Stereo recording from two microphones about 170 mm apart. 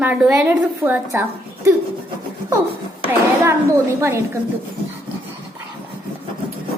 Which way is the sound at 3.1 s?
15° right (ahead or behind).